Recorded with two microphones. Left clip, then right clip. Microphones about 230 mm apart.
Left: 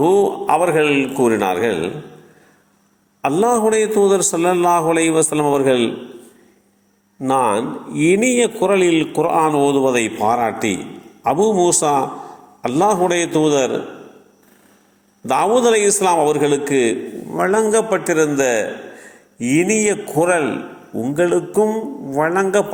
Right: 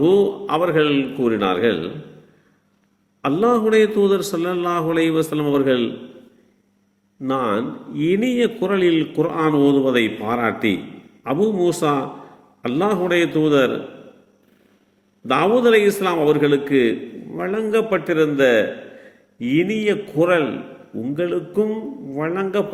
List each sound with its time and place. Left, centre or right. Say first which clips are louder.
0.0 s a man's voice: left 2 dB; centre
3.2 s a man's voice: left 2 dB; centre
7.2 s a man's voice: left 5 dB; centre
15.3 s a man's voice: left 1 dB; centre